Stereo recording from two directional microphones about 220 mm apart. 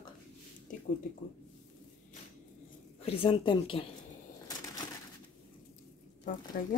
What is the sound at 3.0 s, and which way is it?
Speech, 25° left (ahead or behind).